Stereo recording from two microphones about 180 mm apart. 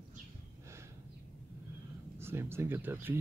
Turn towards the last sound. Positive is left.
turn(degrees=-10)  # may be behind; listen again after turning